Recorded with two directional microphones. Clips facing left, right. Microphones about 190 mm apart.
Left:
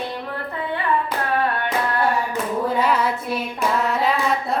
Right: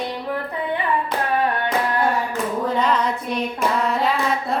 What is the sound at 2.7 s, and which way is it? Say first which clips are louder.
Hands: even; 10° left (ahead or behind).